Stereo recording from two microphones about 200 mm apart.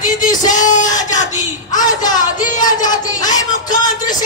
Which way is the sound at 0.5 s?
40° left (ahead or behind).